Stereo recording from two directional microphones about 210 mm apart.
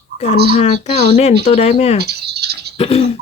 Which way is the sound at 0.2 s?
30° left (ahead or behind).